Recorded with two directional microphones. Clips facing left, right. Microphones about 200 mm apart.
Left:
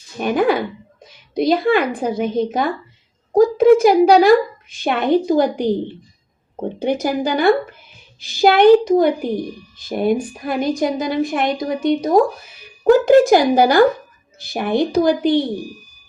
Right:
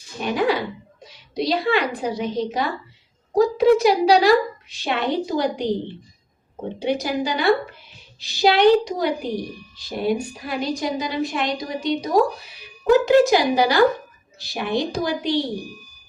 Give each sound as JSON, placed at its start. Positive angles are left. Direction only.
{"t": 0.2, "sound": "a woman's voice", "side_deg": 50}
{"t": 6.7, "sound": "a woman's voice", "side_deg": 50}